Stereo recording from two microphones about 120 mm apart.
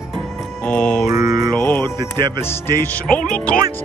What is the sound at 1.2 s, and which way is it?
Mantra, 35° right (ahead or behind).